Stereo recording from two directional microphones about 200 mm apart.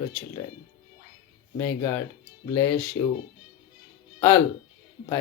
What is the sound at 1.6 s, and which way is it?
Speech, 15° left (ahead or behind).